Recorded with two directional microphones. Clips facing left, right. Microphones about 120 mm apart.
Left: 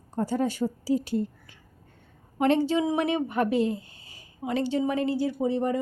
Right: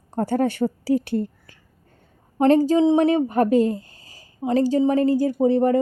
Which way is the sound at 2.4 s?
40° right (ahead or behind).